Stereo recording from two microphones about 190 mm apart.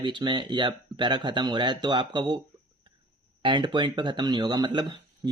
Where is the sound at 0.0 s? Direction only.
25° right (ahead or behind).